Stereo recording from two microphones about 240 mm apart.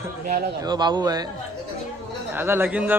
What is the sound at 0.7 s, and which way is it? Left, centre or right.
Speech, centre.